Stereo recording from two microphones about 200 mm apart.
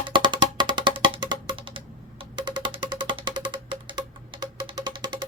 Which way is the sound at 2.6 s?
25° right (ahead or behind).